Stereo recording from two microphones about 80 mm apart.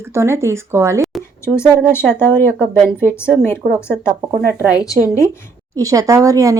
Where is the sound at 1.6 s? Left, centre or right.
Left.